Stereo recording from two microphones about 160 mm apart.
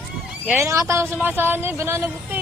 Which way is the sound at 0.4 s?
15° right (ahead or behind).